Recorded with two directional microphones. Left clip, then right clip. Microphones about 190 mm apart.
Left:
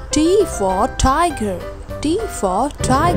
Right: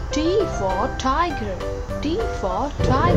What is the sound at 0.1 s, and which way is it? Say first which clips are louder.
Music: left 6 dB; 65° left (ahead or behind).